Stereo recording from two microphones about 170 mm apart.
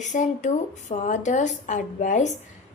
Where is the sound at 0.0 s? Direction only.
45° left (ahead or behind).